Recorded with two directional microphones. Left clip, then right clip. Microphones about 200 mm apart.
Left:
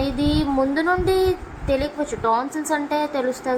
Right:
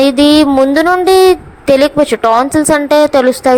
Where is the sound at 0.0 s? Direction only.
50° right (ahead or behind).